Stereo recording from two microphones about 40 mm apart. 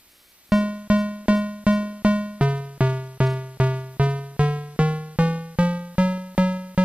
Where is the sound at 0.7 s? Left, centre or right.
Right.